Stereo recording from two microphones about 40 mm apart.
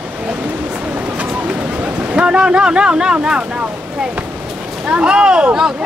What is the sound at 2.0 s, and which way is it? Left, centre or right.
Boat, right.